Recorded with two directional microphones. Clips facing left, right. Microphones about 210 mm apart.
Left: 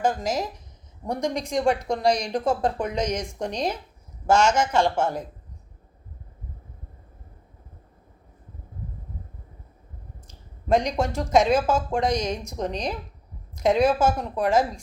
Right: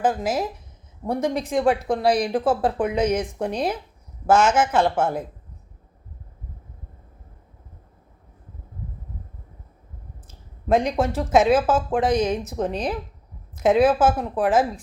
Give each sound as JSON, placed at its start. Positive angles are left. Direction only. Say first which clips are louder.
{"t": 0.0, "sound": "speech", "louder": "right 2 dB", "side_deg": -5}
{"t": 10.7, "sound": "speech", "louder": "right 2 dB", "side_deg": -5}